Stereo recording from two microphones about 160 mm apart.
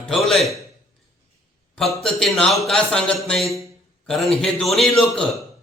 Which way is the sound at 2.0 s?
Centre (ahead or behind).